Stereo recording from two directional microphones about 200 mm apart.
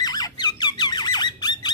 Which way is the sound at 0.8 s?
20° left (ahead or behind).